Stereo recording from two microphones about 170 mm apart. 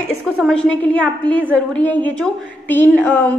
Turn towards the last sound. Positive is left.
turn(degrees=10)  # may be behind; listen again after turning